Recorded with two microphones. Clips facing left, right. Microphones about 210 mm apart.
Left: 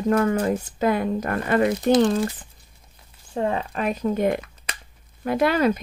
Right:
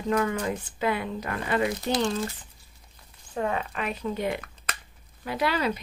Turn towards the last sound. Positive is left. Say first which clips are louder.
# left 7 dB
turn(degrees=50)  # may be behind; listen again after turning